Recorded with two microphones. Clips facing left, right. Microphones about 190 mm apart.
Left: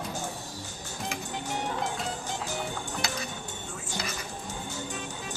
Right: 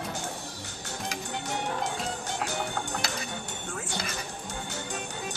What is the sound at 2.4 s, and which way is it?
Music, 70° right (ahead or behind).